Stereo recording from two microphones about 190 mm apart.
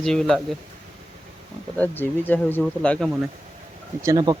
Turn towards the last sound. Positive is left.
turn(degrees=-20)  # may be behind; listen again after turning